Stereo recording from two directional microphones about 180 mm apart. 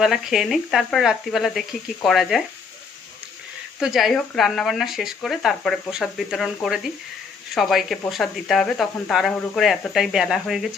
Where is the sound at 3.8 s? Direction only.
Centre (ahead or behind).